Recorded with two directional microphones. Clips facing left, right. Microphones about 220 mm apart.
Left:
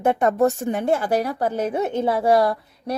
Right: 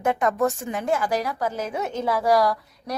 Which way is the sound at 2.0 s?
25° left (ahead or behind).